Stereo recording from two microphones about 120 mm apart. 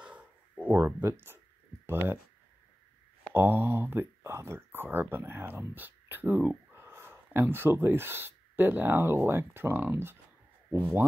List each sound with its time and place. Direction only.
0.0 s a sound: 10° right (ahead or behind)
1.9 s speech: 20° right (ahead or behind)
3.3 s speech: 15° right (ahead or behind)